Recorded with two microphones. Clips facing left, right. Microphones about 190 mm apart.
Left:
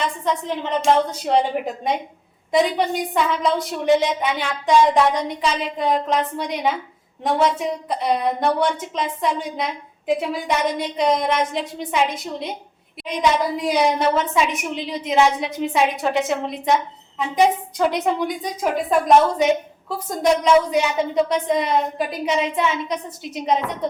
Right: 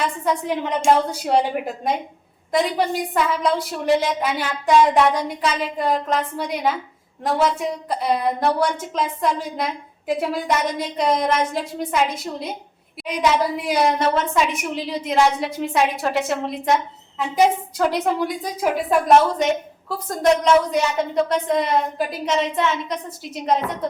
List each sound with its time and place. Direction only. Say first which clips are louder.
0.0 s a woman's voice: right 1 dB; 10° right (ahead or behind)
13.7 s a woman's voice: left 1 dB; centre (ahead or behind)